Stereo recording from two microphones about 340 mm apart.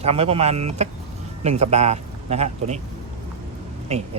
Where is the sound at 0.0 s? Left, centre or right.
Centre.